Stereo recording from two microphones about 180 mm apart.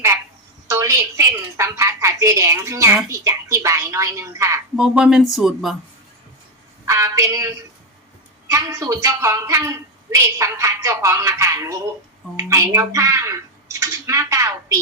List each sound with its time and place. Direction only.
0.7 s a woman's voice: 15° right (ahead or behind)
4.8 s speech: 5° right (ahead or behind)
6.8 s a woman's voice: 15° right (ahead or behind)